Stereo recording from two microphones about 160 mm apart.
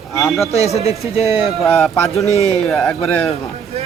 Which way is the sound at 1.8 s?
Centre (ahead or behind).